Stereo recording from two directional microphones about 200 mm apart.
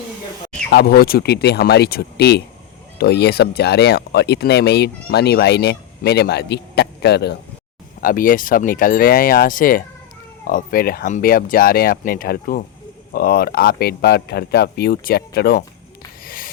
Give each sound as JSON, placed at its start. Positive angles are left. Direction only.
{"t": 0.7, "sound": "speech", "side_deg": 50}
{"t": 8.0, "sound": "speech", "side_deg": 45}
{"t": 16.2, "sound": "snort", "side_deg": 45}